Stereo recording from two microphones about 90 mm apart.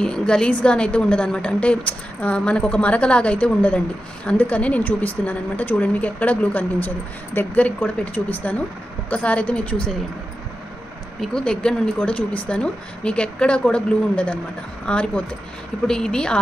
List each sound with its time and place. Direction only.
0.0 s a woman's voice: 10° left (ahead or behind)
11.1 s a woman's voice: 10° left (ahead or behind)